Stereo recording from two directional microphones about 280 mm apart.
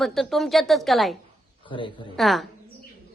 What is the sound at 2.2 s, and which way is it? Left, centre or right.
Speech, centre.